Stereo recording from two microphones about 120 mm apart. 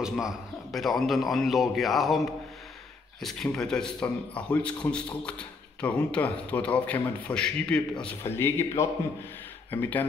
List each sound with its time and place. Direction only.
0.0 s a man's voice: centre (ahead or behind)
8.2 s speech: 20° left (ahead or behind)